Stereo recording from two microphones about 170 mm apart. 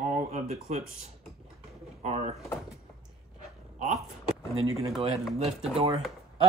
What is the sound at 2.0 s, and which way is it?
Speech, 40° right (ahead or behind).